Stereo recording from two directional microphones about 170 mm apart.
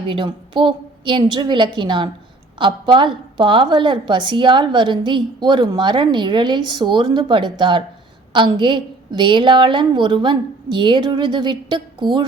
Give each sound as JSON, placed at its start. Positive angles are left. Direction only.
{"t": 0.1, "sound": "a woman's voice", "side_deg": -30}